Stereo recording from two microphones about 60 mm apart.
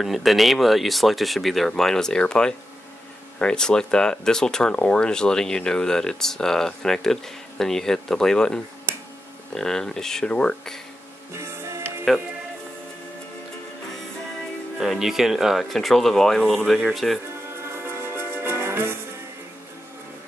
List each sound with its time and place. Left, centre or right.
0.0 s speech: centre
11.3 s music: right
14.8 s speech: centre
17.6 s music: right